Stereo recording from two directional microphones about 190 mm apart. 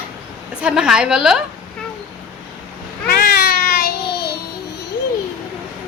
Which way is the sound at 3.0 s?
60° left (ahead or behind).